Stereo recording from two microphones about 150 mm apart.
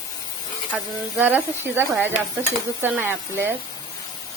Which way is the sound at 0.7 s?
10° right (ahead or behind).